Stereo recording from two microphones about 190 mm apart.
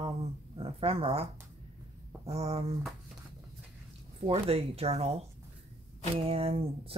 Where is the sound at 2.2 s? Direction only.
30° right (ahead or behind).